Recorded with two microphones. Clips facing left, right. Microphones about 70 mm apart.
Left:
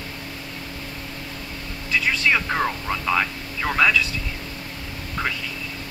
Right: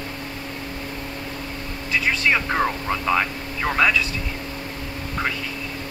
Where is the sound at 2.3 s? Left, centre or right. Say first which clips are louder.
Right 2 dB; centre.